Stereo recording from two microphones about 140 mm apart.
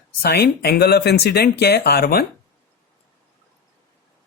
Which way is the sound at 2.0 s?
90° left.